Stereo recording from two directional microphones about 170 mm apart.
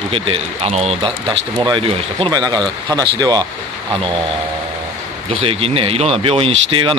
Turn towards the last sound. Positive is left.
turn(degrees=-30)  # may be behind; listen again after turning